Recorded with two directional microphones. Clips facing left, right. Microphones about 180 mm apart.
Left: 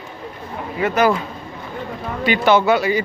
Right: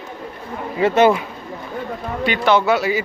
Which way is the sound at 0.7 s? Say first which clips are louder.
Right 3 dB; 25° right (ahead or behind).